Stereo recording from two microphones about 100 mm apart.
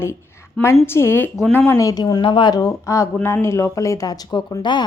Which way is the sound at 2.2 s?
55° left (ahead or behind).